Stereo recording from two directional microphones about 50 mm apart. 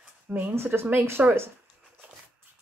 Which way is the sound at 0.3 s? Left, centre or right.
Right.